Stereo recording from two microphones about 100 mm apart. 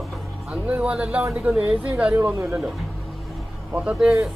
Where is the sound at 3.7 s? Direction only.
10° right (ahead or behind).